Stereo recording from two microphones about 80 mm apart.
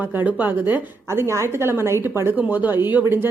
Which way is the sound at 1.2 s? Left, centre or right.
Right.